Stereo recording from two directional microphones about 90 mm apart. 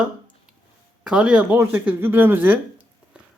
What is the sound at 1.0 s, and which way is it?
Speech, 10° right (ahead or behind).